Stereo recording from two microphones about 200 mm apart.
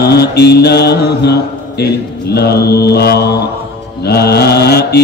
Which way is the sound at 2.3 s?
55° left (ahead or behind).